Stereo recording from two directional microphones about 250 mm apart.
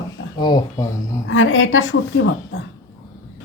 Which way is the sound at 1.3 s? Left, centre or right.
Left.